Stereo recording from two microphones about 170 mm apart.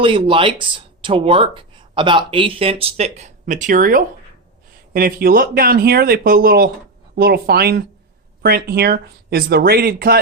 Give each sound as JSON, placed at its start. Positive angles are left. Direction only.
{"t": 0.0, "sound": "speech", "side_deg": -30}